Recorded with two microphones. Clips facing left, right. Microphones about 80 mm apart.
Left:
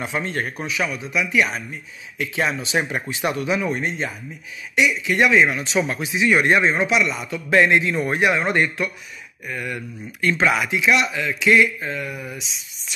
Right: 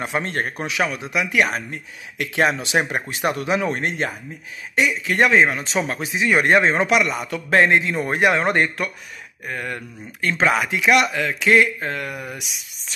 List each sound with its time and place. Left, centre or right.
0.0 s speech: right
0.7 s speech: right
3.6 s speech: right
4.7 s speech: right
7.5 s speech: right
10.8 s speech: right